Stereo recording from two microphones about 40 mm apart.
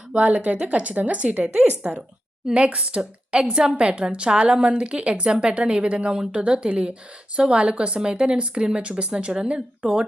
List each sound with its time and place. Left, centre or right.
0.2 s speech: right
3.5 s a woman's voice: right